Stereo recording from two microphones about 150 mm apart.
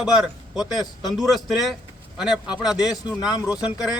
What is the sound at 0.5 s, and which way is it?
A man's voice, 5° right (ahead or behind).